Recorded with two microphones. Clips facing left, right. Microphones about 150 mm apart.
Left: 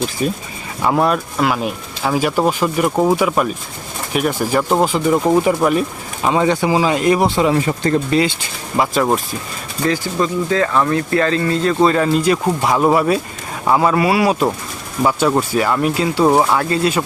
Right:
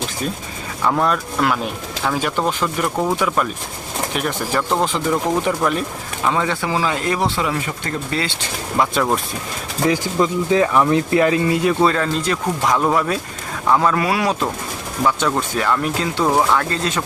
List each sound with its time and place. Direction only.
0.2 s speech: 10° left (ahead or behind)
7.4 s speech: 35° left (ahead or behind)
9.8 s speech: 15° right (ahead or behind)
11.9 s speech: 10° left (ahead or behind)